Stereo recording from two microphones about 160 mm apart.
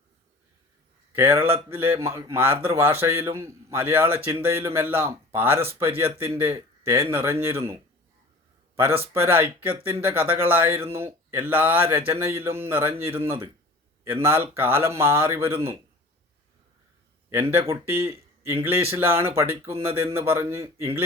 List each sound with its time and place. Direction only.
1.1 s speech: 15° right (ahead or behind)
8.7 s a sound: 15° right (ahead or behind)
9.1 s a man's voice: 15° right (ahead or behind)
17.2 s speech: 15° right (ahead or behind)